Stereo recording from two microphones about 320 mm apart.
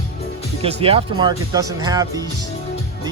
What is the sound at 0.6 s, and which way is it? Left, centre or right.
Speech, centre.